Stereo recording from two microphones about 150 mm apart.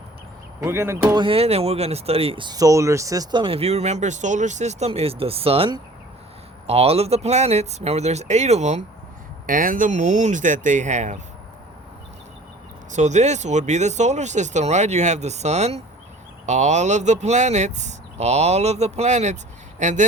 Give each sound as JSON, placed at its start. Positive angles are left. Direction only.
{"t": 0.6, "sound": "speech", "side_deg": -15}
{"t": 1.1, "sound": "speech", "side_deg": -35}
{"t": 3.4, "sound": "speech", "side_deg": -40}
{"t": 9.5, "sound": "speech", "side_deg": -65}
{"t": 12.9, "sound": "speech", "side_deg": -50}